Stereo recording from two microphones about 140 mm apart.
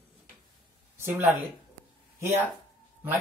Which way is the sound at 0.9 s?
15° right (ahead or behind).